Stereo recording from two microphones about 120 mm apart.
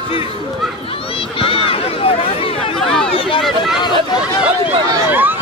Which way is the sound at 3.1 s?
45° left (ahead or behind).